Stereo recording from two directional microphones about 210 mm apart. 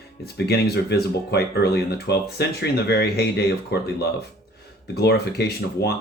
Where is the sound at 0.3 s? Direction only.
50° left (ahead or behind).